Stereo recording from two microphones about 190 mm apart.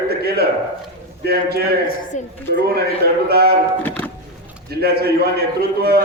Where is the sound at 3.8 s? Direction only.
10° left (ahead or behind).